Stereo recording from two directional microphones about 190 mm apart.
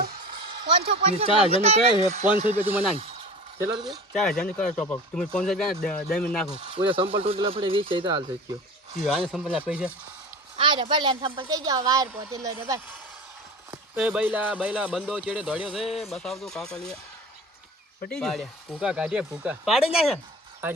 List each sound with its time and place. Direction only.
0.9 s speech: 30° right (ahead or behind)
2.6 s speech: 10° right (ahead or behind)
3.6 s speech: 20° right (ahead or behind)
4.1 s speech: 5° left (ahead or behind)
6.7 s speech: 25° right (ahead or behind)
9.0 s speech: centre (ahead or behind)
10.6 s speech: 25° right (ahead or behind)
13.7 s clip-clop: 5° right (ahead or behind)
14.3 s speech: 5° right (ahead or behind)
18.1 s speech: centre (ahead or behind)